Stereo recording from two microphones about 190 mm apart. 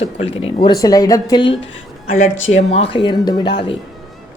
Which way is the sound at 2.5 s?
35° left (ahead or behind).